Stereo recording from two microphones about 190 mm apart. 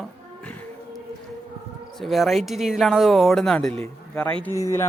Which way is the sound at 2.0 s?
Centre (ahead or behind).